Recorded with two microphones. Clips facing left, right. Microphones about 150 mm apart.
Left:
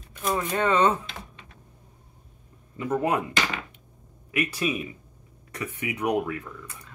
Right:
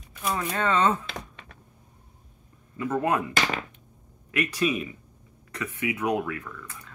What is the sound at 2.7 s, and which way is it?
Speech, 15° left (ahead or behind).